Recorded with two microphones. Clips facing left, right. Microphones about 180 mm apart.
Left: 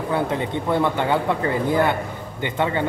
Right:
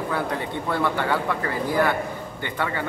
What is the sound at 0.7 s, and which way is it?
A man's voice, 20° left (ahead or behind).